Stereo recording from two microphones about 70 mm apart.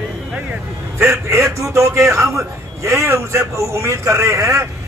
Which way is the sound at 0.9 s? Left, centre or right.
Right.